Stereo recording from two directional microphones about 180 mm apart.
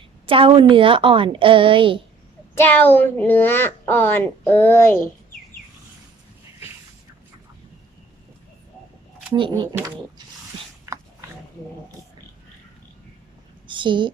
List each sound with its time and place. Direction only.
0.3 s a woman's voice: 30° right (ahead or behind)
2.6 s speech: 10° left (ahead or behind)
9.3 s a woman's voice: 25° right (ahead or behind)
10.9 s dog: 15° right (ahead or behind)
13.7 s a sound: 25° right (ahead or behind)